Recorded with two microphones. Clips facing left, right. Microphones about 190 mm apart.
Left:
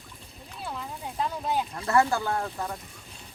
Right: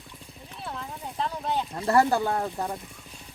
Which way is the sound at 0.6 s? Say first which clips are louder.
Left 1 dB; centre (ahead or behind).